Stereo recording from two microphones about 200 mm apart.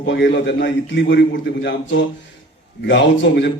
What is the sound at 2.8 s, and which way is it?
Speech, 65° left (ahead or behind).